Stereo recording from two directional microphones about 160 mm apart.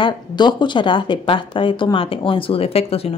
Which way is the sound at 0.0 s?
30° left (ahead or behind).